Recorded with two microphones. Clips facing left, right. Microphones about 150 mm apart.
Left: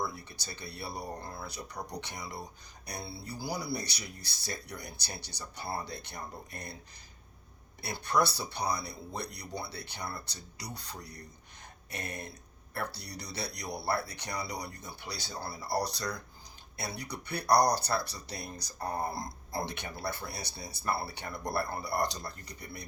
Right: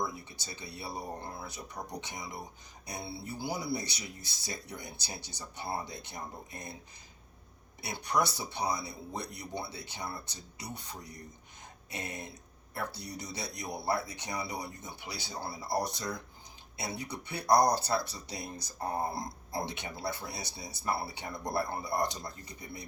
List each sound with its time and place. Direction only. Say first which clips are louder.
0.0 s speech: even; 20° right (ahead or behind)
7.8 s speech: left 2 dB; 20° right (ahead or behind)
11.9 s speech: even; 20° right (ahead or behind)
22.4 s a man's voice: even; 70° left (ahead or behind)